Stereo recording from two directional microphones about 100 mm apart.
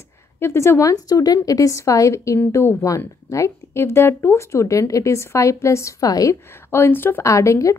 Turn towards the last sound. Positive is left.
turn(degrees=30)  # may be behind; listen again after turning